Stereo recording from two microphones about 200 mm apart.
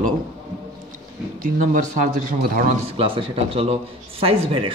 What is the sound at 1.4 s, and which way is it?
A man's voice, 40° right (ahead or behind).